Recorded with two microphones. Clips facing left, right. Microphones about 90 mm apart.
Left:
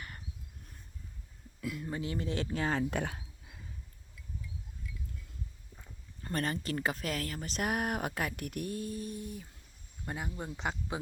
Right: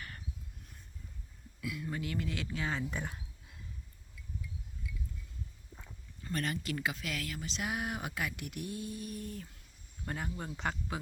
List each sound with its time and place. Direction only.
1.6 s speech: 40° left (ahead or behind)
1.9 s speech: 30° left (ahead or behind)
2.9 s speech: 70° left (ahead or behind)
6.3 s speech: 35° left (ahead or behind)
9.1 s speech: 15° left (ahead or behind)